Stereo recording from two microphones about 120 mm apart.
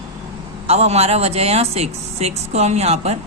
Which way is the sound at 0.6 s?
60° right (ahead or behind).